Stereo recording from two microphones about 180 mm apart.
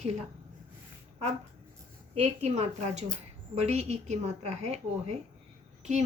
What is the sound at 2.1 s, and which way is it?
A woman's voice, 35° right (ahead or behind).